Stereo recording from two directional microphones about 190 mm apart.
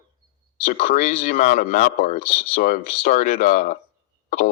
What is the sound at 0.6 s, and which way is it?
Speech, 45° left (ahead or behind).